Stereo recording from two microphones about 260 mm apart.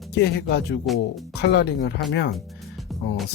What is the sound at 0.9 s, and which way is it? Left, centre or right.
Speech, centre.